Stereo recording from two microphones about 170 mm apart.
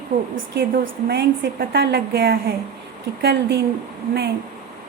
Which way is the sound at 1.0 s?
70° right (ahead or behind).